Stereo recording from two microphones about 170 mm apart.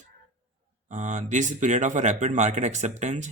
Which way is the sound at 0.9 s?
45° right (ahead or behind).